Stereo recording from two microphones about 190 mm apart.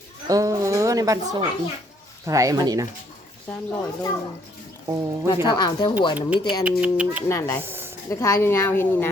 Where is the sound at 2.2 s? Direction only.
15° right (ahead or behind).